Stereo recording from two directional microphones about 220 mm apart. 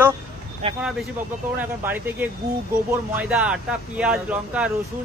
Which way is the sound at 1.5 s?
10° right (ahead or behind).